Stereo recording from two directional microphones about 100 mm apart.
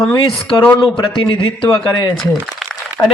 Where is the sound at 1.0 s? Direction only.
55° left (ahead or behind).